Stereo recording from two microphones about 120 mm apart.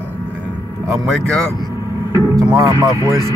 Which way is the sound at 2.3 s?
25° right (ahead or behind).